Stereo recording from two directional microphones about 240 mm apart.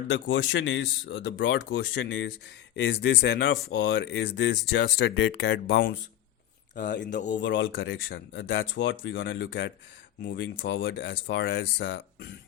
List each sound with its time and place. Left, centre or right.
0.1 s speech: left